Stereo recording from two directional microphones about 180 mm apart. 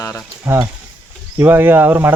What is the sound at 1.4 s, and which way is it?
Speech, 10° right (ahead or behind).